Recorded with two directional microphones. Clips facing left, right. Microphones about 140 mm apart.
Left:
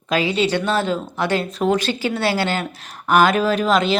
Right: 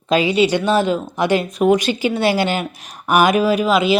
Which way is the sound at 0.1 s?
15° right (ahead or behind).